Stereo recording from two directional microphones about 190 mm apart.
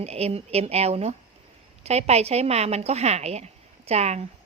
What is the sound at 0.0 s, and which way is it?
A woman's voice, 35° right (ahead or behind).